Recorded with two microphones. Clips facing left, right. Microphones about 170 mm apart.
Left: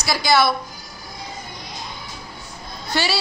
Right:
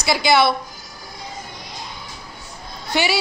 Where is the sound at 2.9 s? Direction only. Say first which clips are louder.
Right 2 dB; 15° right (ahead or behind).